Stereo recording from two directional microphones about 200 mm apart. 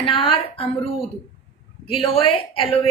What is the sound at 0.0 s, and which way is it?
Speech, 25° left (ahead or behind).